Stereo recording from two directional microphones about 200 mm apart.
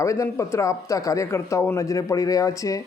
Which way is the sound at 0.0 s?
15° left (ahead or behind).